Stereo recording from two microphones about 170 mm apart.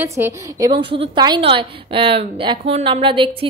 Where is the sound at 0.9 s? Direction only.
30° right (ahead or behind).